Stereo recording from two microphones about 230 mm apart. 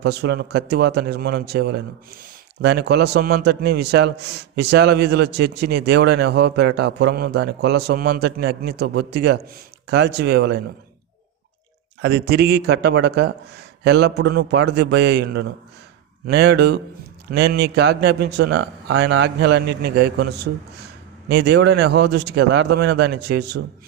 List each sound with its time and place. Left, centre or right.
0.0 s a man's voice: right
12.0 s a man's voice: right